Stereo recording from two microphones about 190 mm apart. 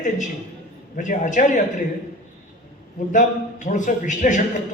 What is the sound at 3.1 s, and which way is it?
A man's voice, 40° left (ahead or behind).